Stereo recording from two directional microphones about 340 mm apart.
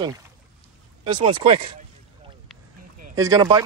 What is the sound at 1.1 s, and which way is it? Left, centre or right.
Speech, centre.